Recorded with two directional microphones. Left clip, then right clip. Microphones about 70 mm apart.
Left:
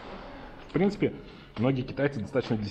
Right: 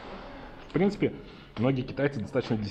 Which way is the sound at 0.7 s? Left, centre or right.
Left.